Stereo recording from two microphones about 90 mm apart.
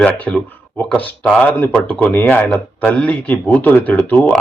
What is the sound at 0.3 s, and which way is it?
A man's voice, 10° left (ahead or behind).